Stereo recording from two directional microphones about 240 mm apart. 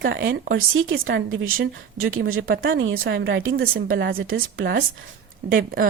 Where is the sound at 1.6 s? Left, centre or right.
Right.